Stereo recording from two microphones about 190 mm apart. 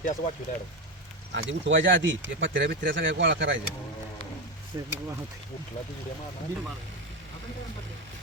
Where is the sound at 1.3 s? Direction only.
75° right (ahead or behind).